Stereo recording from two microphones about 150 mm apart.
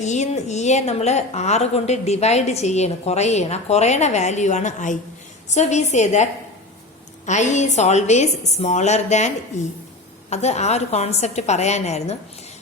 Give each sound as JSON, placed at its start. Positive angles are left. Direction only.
{"t": 0.0, "sound": "a woman's voice", "side_deg": 50}
{"t": 7.3, "sound": "a woman's voice", "side_deg": 50}